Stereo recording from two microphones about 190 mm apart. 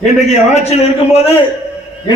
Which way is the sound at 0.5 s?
35° left (ahead or behind).